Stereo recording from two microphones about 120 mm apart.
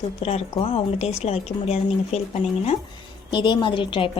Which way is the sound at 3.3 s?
40° left (ahead or behind).